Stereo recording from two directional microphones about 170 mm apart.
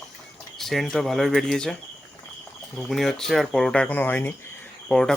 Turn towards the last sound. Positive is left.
turn(degrees=5)  # may be behind; listen again after turning